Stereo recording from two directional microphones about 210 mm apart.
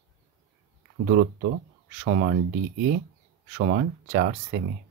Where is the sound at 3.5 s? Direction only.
45° right (ahead or behind).